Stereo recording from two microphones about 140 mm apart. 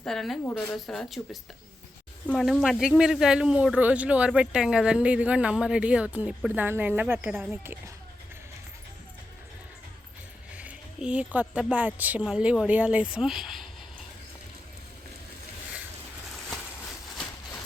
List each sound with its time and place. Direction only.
0.0 s speech: centre (ahead or behind); by 7.8 s 15° right (ahead or behind)
10.5 s speech: 10° right (ahead or behind)